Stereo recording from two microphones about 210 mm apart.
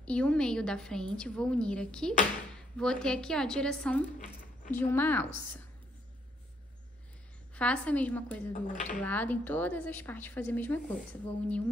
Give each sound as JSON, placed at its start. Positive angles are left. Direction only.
{"t": 0.0, "sound": "a woman's voice", "side_deg": 5}
{"t": 7.5, "sound": "speech", "side_deg": 5}
{"t": 8.6, "sound": "speech", "side_deg": 35}
{"t": 9.0, "sound": "speech", "side_deg": 10}